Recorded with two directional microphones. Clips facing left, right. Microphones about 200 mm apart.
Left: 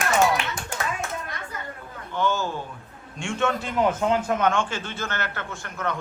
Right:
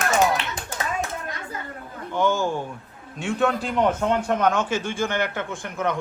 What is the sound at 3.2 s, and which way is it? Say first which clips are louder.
A man's voice: right 3 dB; centre (ahead or behind).